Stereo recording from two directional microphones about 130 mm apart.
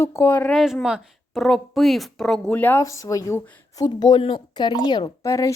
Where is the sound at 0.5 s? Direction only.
Centre (ahead or behind); by 2.8 s 15° left (ahead or behind).